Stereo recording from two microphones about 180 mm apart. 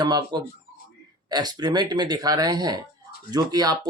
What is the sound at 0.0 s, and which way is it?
Speech, 20° right (ahead or behind).